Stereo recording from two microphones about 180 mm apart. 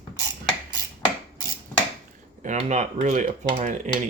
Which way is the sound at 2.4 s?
40° right (ahead or behind).